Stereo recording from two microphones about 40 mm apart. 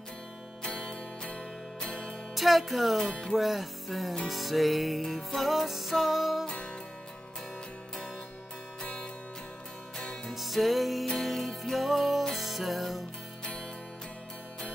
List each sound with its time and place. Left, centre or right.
0.7 s music: left
2.3 s speech: centre
3.0 s speech: centre
3.3 s music: centre
10.3 s music: centre